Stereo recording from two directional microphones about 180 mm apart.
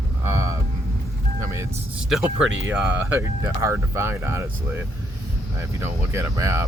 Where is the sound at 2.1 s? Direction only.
5° right (ahead or behind).